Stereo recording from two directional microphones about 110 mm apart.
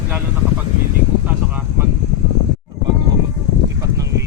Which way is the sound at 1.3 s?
15° right (ahead or behind).